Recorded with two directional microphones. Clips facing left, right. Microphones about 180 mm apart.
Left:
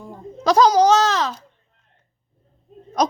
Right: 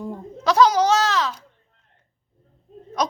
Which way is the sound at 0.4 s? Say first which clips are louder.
Left 3 dB; 40° left (ahead or behind).